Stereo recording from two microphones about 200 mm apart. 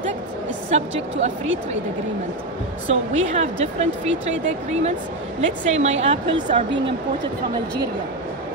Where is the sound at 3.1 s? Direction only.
35° right (ahead or behind).